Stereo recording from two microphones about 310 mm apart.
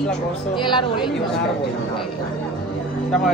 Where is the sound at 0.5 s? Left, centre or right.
Centre.